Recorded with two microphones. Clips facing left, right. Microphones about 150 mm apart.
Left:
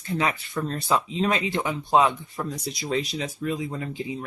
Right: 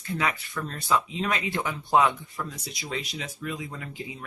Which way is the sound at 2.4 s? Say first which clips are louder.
Left 5 dB; 35° left (ahead or behind).